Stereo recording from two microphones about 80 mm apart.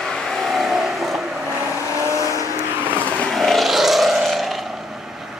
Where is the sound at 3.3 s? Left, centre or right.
Centre.